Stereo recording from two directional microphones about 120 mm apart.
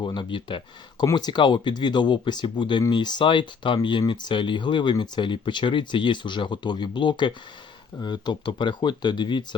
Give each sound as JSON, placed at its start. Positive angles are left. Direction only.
{"t": 0.0, "sound": "speech", "side_deg": 40}